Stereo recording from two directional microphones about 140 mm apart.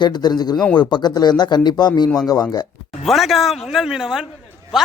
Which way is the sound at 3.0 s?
Centre (ahead or behind).